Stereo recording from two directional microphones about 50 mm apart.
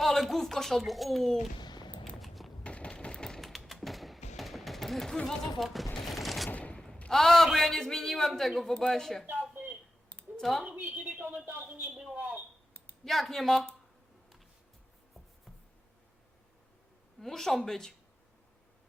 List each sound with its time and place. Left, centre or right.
0.0 s speech: centre
2.0 s walk: centre
2.6 s typewriter: left
3.5 s a sound: centre
5.2 s a man's voice: centre
6.1 s fusillade: centre
6.5 s fusillade: left
7.1 s a man's voice: centre
9.3 s a sound: right
10.4 s a man's voice: centre
10.8 s a woman's voice: right
11.6 s a sound: right
13.1 s a man's voice: centre
17.2 s speech: centre